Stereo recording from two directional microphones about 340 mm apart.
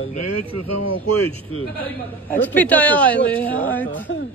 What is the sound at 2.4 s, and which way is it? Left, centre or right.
A woman's voice, centre.